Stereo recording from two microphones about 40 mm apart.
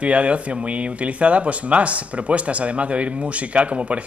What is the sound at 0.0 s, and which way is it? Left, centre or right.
Speech, right.